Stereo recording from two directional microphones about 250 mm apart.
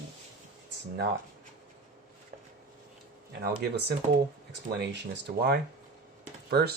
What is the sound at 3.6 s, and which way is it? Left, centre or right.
Speech, right.